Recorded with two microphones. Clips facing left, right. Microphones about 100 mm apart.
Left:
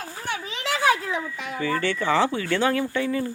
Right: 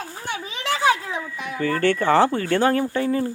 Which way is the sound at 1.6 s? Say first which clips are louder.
Right 5 dB; 50° right (ahead or behind).